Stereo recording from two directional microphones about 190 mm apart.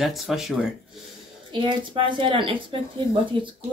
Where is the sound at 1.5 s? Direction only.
25° right (ahead or behind).